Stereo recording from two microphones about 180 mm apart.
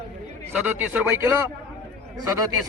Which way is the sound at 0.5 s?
5° right (ahead or behind).